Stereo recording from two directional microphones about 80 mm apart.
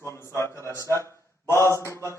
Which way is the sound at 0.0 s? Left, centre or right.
Left.